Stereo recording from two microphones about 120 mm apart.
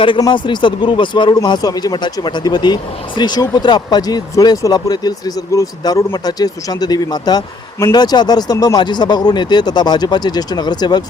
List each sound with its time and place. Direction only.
0.2 s speech: 40° left (ahead or behind)